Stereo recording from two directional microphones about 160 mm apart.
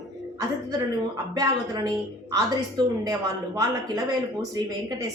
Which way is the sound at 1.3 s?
25° right (ahead or behind).